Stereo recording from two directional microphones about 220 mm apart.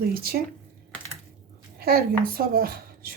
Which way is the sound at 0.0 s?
45° right (ahead or behind).